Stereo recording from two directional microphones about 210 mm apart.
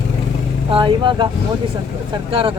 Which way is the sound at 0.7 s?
25° right (ahead or behind).